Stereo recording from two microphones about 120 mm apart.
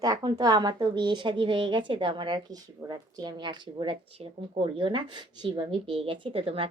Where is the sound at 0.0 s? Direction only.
35° right (ahead or behind).